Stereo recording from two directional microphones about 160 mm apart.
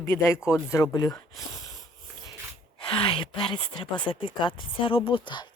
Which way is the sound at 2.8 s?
30° left (ahead or behind).